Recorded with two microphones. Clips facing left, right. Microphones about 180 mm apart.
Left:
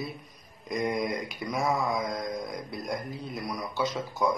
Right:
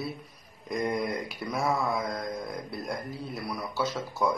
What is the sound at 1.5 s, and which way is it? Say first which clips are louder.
A man's voice: even; centre (ahead or behind).